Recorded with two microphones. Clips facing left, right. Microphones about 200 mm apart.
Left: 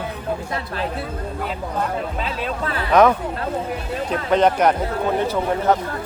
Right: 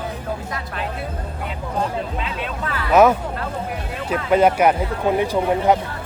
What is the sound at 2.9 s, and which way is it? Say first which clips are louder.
Speech: right 1 dB; 5° right (ahead or behind).